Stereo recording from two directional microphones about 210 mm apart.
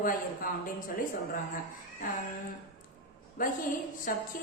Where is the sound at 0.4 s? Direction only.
40° left (ahead or behind).